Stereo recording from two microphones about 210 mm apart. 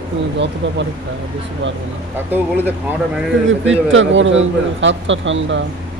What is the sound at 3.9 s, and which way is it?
A man's voice, 65° right (ahead or behind).